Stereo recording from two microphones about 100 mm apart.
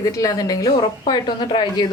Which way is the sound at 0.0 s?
35° left (ahead or behind).